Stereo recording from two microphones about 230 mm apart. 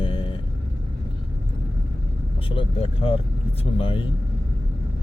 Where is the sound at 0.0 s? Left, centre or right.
Left.